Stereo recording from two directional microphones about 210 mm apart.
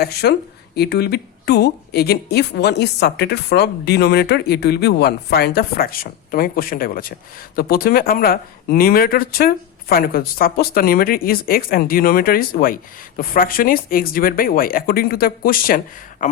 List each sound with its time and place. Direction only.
0.0 s speech: 50° left (ahead or behind)